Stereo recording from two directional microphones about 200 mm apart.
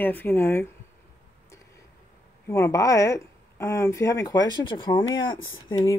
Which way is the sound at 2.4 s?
15° left (ahead or behind).